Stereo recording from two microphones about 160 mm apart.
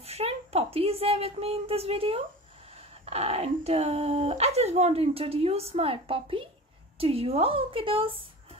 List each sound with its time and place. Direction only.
0.0 s speech: 40° right (ahead or behind)